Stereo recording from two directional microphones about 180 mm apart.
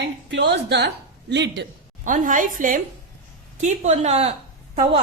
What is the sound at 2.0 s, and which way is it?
A woman's voice, 45° right (ahead or behind).